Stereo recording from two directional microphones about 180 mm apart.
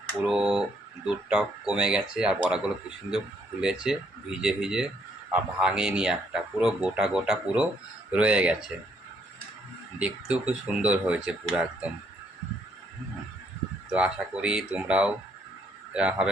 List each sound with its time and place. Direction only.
0.2 s speech: 5° right (ahead or behind)
10.0 s speech: 5° right (ahead or behind)
13.9 s speech: 5° right (ahead or behind)